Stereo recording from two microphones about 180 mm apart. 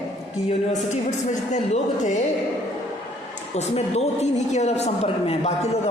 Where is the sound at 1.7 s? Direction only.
40° left (ahead or behind).